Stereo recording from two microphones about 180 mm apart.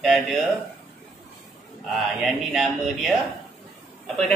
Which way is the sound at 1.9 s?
Centre (ahead or behind).